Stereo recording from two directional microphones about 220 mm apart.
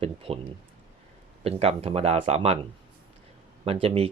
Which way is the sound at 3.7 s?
25° right (ahead or behind).